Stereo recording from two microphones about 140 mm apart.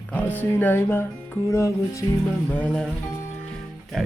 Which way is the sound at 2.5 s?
10° left (ahead or behind).